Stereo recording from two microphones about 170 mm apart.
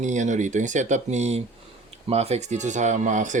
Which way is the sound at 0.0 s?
45° right (ahead or behind).